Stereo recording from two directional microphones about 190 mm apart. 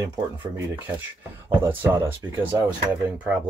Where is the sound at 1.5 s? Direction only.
10° right (ahead or behind).